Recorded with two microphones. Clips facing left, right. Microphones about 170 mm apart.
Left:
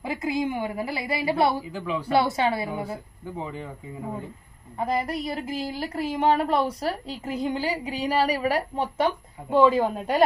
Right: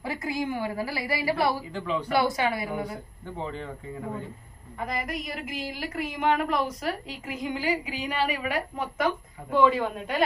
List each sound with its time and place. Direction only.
0.0 s a woman's voice: 20° left (ahead or behind)
1.7 s speech: 10° left (ahead or behind)
2.0 s a woman's voice: 25° left (ahead or behind)
3.3 s speech: 10° left (ahead or behind)
4.7 s a woman's voice: 30° left (ahead or behind)